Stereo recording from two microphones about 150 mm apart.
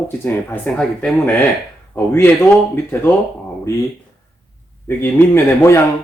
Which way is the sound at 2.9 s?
10° left (ahead or behind).